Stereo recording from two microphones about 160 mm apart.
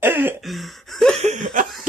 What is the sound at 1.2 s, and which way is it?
Laughter, 50° right (ahead or behind).